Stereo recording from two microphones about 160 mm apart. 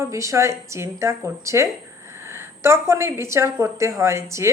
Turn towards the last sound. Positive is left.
turn(degrees=-15)  # may be behind; listen again after turning